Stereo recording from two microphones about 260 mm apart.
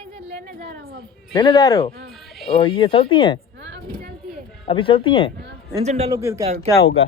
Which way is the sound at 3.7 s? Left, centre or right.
Right.